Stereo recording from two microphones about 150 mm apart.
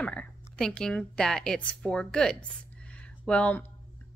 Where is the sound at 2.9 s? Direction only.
5° left (ahead or behind).